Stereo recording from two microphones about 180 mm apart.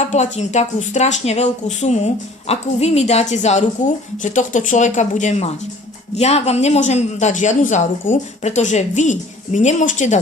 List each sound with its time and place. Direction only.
0.1 s a woman's voice: 40° left (ahead or behind)